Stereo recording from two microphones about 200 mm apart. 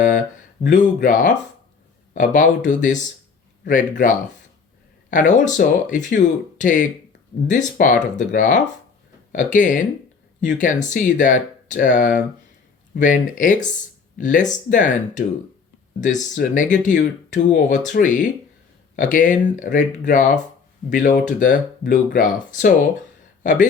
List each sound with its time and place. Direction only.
0.6 s speech: 40° left (ahead or behind)
16.3 s speech: 40° left (ahead or behind)